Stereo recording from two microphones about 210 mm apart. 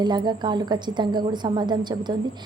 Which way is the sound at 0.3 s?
20° right (ahead or behind).